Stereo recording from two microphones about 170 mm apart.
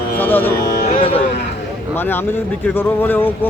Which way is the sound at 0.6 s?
65° left (ahead or behind).